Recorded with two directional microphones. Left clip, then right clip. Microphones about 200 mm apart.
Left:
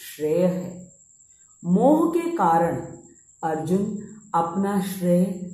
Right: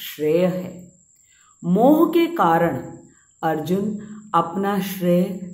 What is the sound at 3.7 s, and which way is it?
A woman's voice, 50° right (ahead or behind).